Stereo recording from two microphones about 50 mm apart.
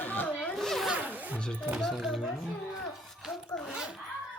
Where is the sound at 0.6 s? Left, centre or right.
Centre.